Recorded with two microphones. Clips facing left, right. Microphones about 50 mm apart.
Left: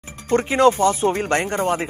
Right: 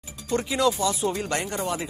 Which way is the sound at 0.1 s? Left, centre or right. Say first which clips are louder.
Left 7 dB; left.